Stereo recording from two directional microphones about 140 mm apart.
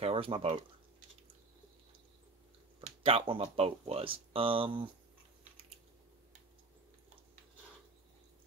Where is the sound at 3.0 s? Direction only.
40° right (ahead or behind).